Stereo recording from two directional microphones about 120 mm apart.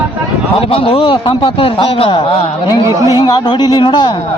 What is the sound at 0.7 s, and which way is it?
Speech, 50° left (ahead or behind).